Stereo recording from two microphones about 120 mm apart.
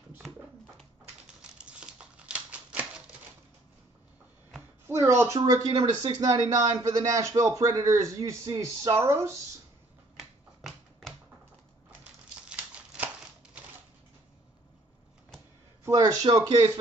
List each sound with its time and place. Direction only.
1.6 s a sound: 10° right (ahead or behind)
4.8 s a sound: 20° right (ahead or behind)
5.5 s a man's voice: 35° right (ahead or behind)
10.1 s typewriter: centre (ahead or behind)
12.4 s crumpling: 10° right (ahead or behind)
15.8 s speech: 30° right (ahead or behind)